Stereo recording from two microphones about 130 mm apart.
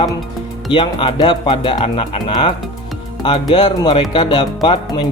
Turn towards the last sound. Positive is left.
turn(degrees=40)  # may be behind; listen again after turning